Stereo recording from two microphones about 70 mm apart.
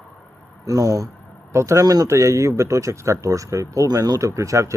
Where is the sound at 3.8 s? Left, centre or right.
Right.